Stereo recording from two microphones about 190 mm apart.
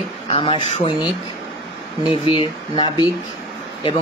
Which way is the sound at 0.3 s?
25° left (ahead or behind).